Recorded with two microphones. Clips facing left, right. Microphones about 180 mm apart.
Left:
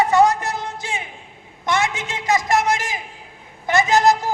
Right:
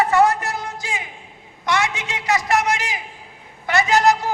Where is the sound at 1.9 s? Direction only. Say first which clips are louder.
Left 1 dB; 45° left (ahead or behind).